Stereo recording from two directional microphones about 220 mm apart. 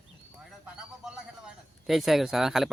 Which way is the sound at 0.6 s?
5° right (ahead or behind).